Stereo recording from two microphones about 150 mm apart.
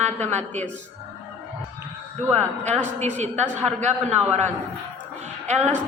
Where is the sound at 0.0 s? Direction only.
50° right (ahead or behind).